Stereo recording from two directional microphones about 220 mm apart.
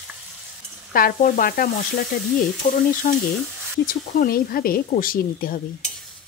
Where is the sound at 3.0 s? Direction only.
35° left (ahead or behind).